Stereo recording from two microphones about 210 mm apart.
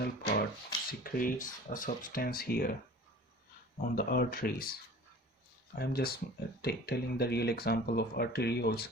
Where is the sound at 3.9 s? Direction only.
45° left (ahead or behind).